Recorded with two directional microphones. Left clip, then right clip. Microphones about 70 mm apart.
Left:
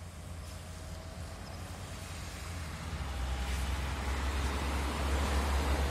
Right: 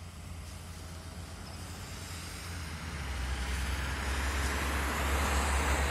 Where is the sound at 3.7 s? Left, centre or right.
Right.